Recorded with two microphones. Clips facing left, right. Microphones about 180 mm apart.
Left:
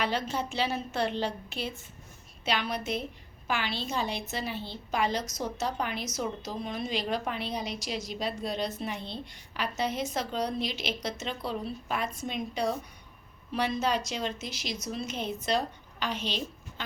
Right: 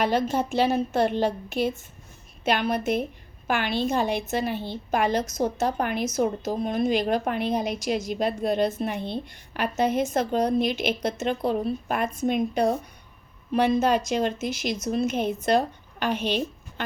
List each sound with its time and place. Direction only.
0.0 s speech: 50° right (ahead or behind)